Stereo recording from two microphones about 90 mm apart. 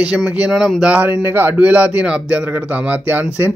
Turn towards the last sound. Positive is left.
turn(degrees=-20)  # may be behind; listen again after turning